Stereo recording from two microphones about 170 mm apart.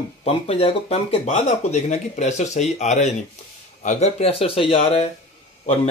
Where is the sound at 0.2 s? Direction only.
35° left (ahead or behind).